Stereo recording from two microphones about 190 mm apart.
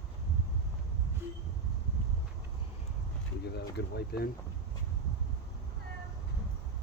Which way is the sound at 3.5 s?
60° left (ahead or behind).